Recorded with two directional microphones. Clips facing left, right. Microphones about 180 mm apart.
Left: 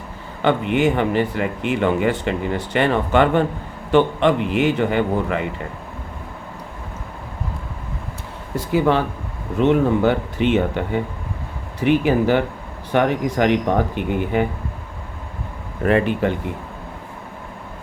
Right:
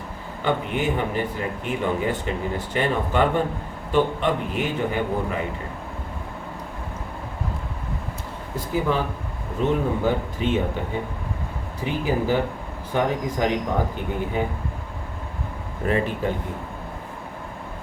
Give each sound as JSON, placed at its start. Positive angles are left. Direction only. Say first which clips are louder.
{"t": 0.4, "sound": "a man's voice", "louder": "left 6 dB", "side_deg": 80}
{"t": 8.5, "sound": "speech", "louder": "left 6 dB", "side_deg": 75}
{"t": 11.8, "sound": "speech", "louder": "left 8 dB", "side_deg": 75}
{"t": 15.8, "sound": "speech", "louder": "left 6 dB", "side_deg": 70}